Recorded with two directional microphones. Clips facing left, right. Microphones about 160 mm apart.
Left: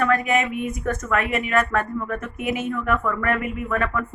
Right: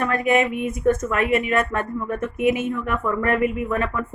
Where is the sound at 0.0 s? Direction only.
25° right (ahead or behind).